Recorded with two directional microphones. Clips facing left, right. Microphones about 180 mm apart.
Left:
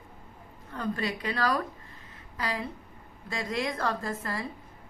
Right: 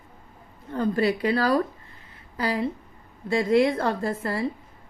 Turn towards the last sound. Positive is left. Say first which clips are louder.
# right 7 dB
turn(degrees=-30)  # may be behind; listen again after turning